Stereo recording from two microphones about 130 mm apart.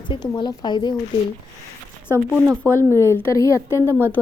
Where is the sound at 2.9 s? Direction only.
20° left (ahead or behind).